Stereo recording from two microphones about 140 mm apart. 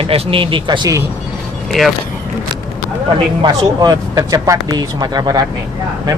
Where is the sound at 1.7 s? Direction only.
Centre (ahead or behind).